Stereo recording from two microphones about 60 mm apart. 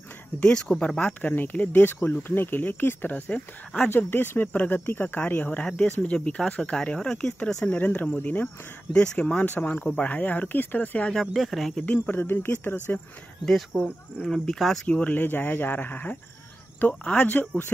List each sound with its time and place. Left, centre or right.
0.4 s speech: centre
6.1 s speech: centre
7.6 s speech: left
8.9 s speech: centre
9.4 s speech: left
11.1 s speech: centre
11.7 s speech: left
13.5 s speech: centre
14.9 s speech: left
17.0 s speech: centre
17.3 s speech: left